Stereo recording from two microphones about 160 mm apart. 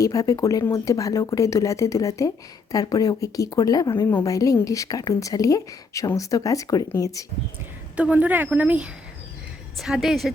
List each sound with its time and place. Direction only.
0.0 s a woman's voice: 20° left (ahead or behind)
7.9 s a woman's voice: 10° right (ahead or behind)